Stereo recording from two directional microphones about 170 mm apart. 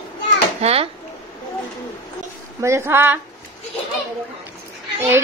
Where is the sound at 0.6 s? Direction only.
35° right (ahead or behind).